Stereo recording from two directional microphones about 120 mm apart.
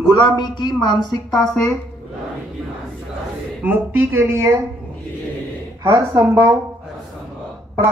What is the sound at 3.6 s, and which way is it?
Speech, 15° right (ahead or behind).